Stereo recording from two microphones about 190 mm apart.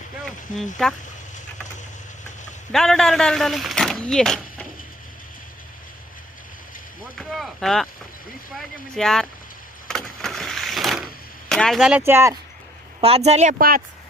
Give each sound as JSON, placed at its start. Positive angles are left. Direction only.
{"t": 0.5, "sound": "speech", "side_deg": 45}
{"t": 2.7, "sound": "speech", "side_deg": 0}
{"t": 7.2, "sound": "rowboat", "side_deg": 0}
{"t": 8.5, "sound": "speech", "side_deg": 5}
{"t": 9.9, "sound": "a sound", "side_deg": 0}
{"t": 13.0, "sound": "speech", "side_deg": -30}